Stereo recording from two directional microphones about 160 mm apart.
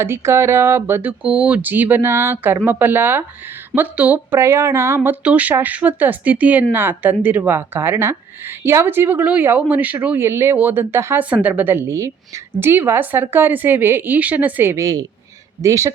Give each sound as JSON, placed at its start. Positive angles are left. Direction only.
{"t": 0.0, "sound": "speech", "side_deg": -15}